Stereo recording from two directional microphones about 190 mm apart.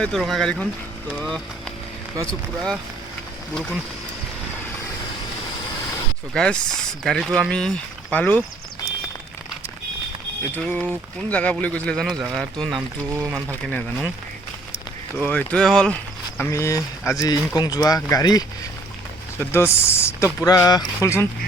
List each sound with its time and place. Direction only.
0.0 s speech: centre (ahead or behind)
6.3 s speech: 5° left (ahead or behind)
10.5 s speech: 10° left (ahead or behind)
13.1 s speech: 15° right (ahead or behind)
13.7 s speech: 10° left (ahead or behind)
15.2 s speech: 5° left (ahead or behind)
16.4 s speech: 15° left (ahead or behind)